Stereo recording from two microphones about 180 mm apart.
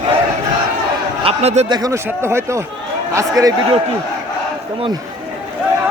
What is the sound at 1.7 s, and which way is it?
A man's voice, 20° right (ahead or behind).